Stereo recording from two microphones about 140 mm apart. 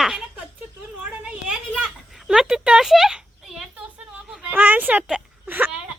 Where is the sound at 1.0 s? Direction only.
10° right (ahead or behind).